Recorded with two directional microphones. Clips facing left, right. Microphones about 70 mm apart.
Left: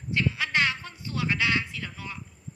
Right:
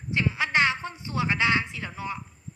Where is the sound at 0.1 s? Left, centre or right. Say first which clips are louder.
Right 2 dB; right.